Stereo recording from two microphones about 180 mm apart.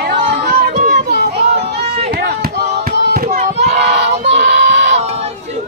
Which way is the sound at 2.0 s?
60° right (ahead or behind).